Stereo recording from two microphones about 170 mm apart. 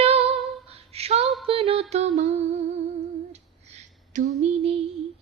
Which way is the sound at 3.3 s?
40° right (ahead or behind).